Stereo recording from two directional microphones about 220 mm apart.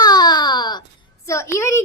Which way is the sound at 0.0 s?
20° left (ahead or behind).